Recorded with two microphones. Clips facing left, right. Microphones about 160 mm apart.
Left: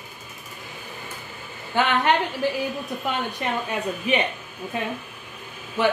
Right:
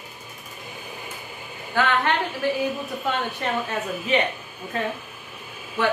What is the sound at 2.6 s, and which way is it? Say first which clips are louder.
Speech: right 2 dB; centre (ahead or behind).